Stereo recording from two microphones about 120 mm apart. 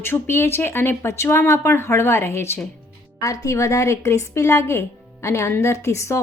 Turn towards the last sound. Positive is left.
turn(degrees=25)  # may be behind; listen again after turning